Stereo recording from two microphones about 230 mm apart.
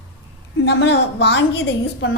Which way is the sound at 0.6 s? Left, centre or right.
Left.